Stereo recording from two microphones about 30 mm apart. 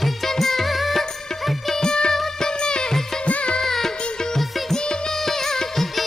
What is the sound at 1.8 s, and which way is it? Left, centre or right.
Music, left.